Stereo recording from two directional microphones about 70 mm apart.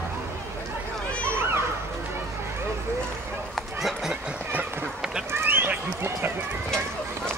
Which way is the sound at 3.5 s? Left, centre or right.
Centre.